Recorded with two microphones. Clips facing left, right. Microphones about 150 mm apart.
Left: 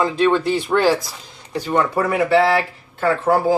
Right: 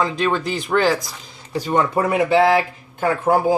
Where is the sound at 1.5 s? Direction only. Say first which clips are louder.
Even; 15° right (ahead or behind).